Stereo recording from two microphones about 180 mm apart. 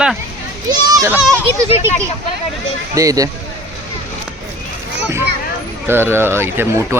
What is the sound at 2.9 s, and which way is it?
Speech, 20° right (ahead or behind).